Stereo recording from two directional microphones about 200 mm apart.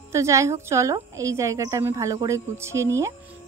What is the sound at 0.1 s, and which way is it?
A woman's voice, 15° right (ahead or behind).